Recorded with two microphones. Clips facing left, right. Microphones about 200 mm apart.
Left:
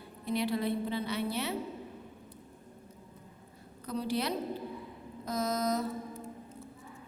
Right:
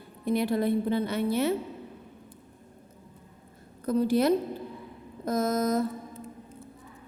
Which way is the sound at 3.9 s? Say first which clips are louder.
Right 10 dB; 50° right (ahead or behind).